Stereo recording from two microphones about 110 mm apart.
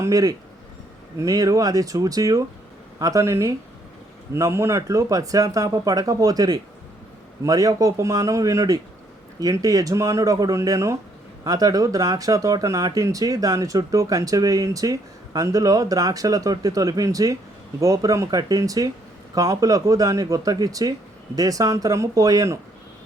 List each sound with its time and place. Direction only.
0.0 s speech: 35° right (ahead or behind)